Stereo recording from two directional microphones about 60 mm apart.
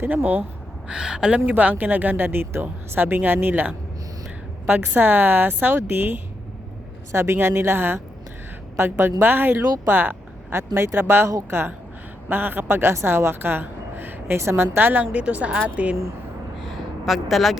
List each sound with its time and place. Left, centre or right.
0.0 s speech: right
0.9 s speech: centre
1.5 s speech: right
7.1 s speech: right
10.5 s speech: right
12.3 s a woman's voice: right
14.3 s speech: right
15.0 s speech: centre
16.6 s a sound: centre